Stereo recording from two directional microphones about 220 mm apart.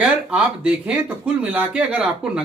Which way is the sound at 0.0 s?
5° right (ahead or behind).